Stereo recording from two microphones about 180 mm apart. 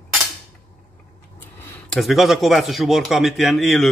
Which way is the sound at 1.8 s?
Centre (ahead or behind).